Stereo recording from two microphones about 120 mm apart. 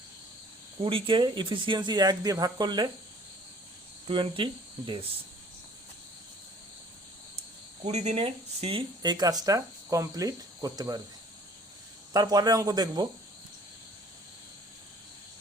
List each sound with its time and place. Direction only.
0.8 s speech: 45° right (ahead or behind)
4.0 s speech: 45° right (ahead or behind)
7.9 s speech: 65° right (ahead or behind)
9.0 s speech: 35° right (ahead or behind)
12.1 s speech: 30° right (ahead or behind)